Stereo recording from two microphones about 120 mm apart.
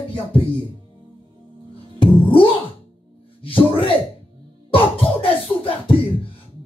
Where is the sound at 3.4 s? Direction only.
50° left (ahead or behind).